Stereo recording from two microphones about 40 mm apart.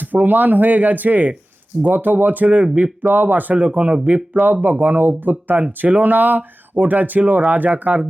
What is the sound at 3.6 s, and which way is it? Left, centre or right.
Speech, right.